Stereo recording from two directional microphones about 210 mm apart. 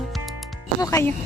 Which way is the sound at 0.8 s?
15° left (ahead or behind).